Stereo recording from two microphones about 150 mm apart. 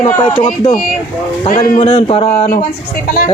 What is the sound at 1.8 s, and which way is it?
Speech, 35° left (ahead or behind).